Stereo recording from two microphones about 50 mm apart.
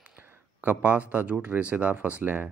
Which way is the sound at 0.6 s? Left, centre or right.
Right.